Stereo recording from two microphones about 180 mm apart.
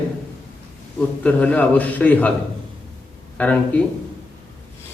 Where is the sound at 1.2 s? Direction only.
10° left (ahead or behind).